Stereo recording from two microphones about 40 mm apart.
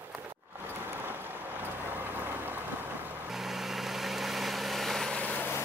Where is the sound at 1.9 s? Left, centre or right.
Right.